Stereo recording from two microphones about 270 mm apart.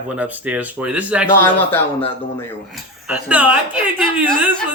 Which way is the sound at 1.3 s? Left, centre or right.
Centre.